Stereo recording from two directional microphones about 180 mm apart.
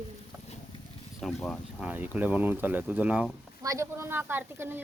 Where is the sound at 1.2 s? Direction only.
Centre (ahead or behind).